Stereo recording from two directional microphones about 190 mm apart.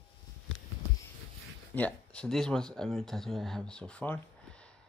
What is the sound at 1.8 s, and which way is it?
Speech, 5° left (ahead or behind).